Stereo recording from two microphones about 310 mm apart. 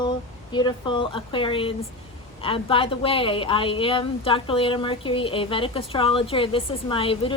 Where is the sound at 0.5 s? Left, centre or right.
Centre.